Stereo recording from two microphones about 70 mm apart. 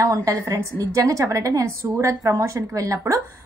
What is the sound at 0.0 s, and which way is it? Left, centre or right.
A woman's voice, right.